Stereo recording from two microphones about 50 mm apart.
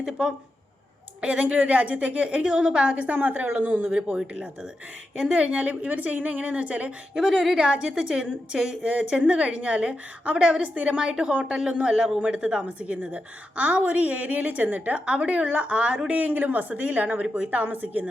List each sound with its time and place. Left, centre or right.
0.0 s a woman's voice: centre
1.2 s a woman's voice: right
3.9 s a woman's voice: right
7.2 s a woman's voice: centre
8.8 s a woman's voice: right
15.0 s a woman's voice: right